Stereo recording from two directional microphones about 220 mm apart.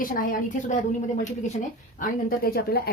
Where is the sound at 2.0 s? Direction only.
40° left (ahead or behind).